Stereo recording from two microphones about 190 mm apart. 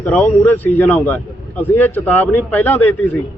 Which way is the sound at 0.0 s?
10° left (ahead or behind).